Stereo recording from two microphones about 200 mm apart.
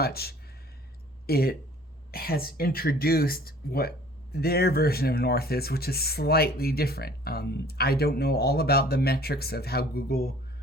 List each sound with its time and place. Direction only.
0.0 s speech: 50° left (ahead or behind)